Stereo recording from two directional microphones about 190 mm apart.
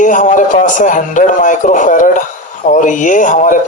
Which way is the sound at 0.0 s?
40° left (ahead or behind).